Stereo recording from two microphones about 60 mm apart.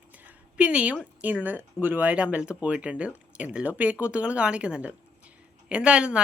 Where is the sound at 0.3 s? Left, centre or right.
Right.